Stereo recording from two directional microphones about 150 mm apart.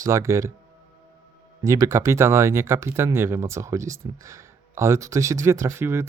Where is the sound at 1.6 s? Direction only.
20° right (ahead or behind).